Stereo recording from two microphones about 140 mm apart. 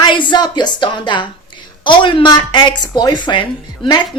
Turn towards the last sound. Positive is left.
turn(degrees=35)  # may be behind; listen again after turning